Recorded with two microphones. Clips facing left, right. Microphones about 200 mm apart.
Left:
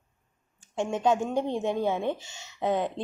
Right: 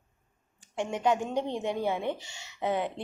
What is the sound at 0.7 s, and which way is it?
Speech, 15° right (ahead or behind).